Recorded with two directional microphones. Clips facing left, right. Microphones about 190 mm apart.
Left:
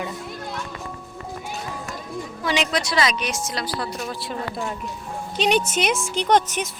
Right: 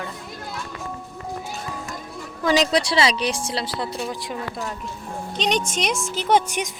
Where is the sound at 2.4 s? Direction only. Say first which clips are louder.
Right 5 dB; 45° right (ahead or behind).